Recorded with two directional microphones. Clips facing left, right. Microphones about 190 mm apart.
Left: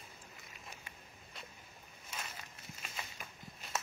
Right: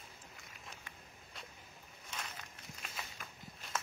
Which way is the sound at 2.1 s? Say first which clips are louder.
Even; 5° left (ahead or behind).